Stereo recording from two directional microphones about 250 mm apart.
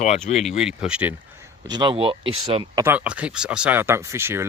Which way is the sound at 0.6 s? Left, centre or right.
Centre.